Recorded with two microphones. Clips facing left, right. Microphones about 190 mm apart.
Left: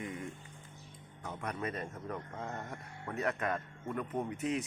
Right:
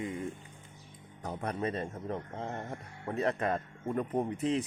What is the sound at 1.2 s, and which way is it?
Speech, 35° right (ahead or behind).